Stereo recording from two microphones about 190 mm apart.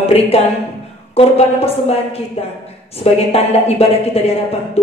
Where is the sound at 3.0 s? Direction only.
35° left (ahead or behind).